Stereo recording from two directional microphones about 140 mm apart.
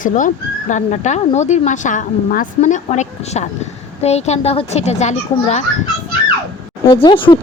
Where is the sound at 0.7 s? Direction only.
55° left (ahead or behind).